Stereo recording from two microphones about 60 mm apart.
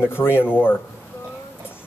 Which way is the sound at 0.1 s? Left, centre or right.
Left.